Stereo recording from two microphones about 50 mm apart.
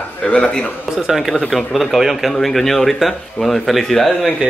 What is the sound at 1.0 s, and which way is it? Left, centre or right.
Speech, centre.